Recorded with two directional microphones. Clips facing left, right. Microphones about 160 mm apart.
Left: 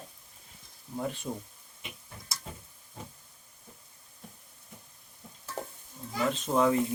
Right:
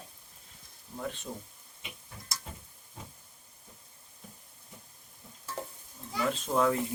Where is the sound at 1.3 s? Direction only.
15° left (ahead or behind).